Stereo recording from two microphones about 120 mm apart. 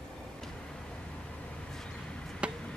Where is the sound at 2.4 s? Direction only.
10° right (ahead or behind).